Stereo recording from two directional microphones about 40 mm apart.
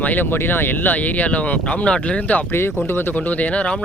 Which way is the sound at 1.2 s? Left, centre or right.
Left.